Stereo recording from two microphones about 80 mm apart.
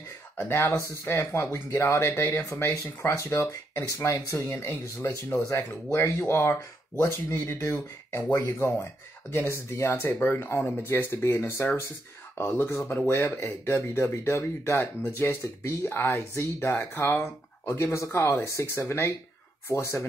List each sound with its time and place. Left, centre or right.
0.4 s speech: left
1.1 s speech: left
18.1 s speech: left
18.4 s speech: left
18.8 s speech: left